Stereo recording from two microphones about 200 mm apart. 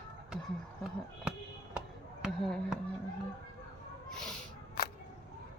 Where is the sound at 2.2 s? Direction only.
Centre (ahead or behind).